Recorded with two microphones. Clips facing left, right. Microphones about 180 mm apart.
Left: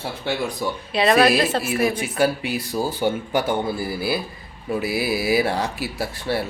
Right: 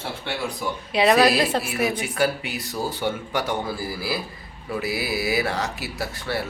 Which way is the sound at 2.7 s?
25° left (ahead or behind).